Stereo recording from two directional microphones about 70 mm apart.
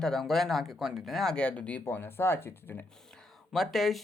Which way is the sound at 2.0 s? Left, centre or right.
Left.